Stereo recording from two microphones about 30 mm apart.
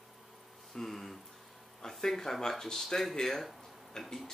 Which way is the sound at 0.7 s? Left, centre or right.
Centre.